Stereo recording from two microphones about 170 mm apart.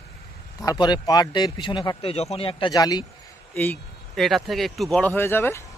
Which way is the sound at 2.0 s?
35° left (ahead or behind).